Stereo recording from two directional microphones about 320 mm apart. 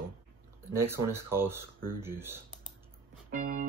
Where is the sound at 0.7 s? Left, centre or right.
Centre.